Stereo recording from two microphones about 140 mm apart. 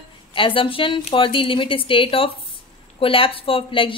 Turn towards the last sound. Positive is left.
turn(degrees=40)  # may be behind; listen again after turning